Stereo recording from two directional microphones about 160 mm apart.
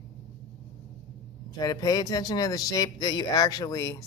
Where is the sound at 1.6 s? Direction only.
25° left (ahead or behind).